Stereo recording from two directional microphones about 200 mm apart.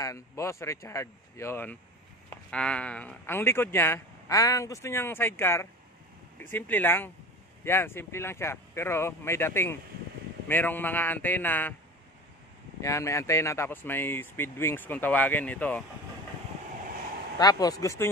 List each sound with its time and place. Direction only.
0.0 s speech: 15° left (ahead or behind)
12.8 s speech: 15° left (ahead or behind)
17.4 s speech: 20° left (ahead or behind)